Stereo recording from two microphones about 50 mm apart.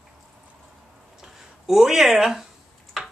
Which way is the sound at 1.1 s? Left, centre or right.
Centre.